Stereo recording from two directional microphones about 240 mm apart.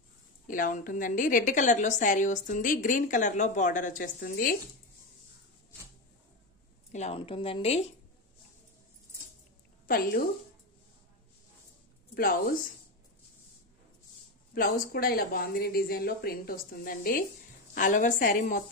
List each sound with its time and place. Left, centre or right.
0.5 s a woman's voice: left
6.9 s speech: left
9.8 s a woman's voice: left
12.1 s speech: left
14.5 s a woman's voice: left